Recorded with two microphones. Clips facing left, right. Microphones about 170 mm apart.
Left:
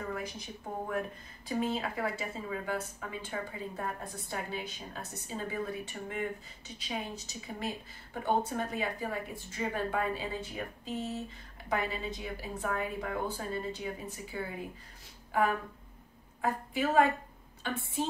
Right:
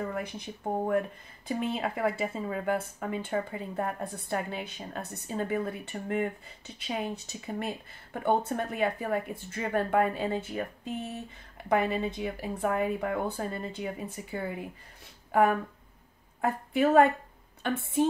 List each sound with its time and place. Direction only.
0.1 s speech: 60° right (ahead or behind)
11.7 s speech: 60° right (ahead or behind)
16.3 s a woman's voice: 60° right (ahead or behind)